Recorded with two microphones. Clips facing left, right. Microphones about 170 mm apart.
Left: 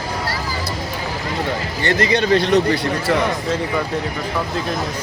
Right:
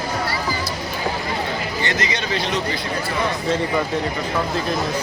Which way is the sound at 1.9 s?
55° left (ahead or behind).